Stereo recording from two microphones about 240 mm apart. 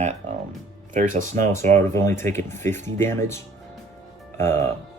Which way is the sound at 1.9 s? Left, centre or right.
Centre.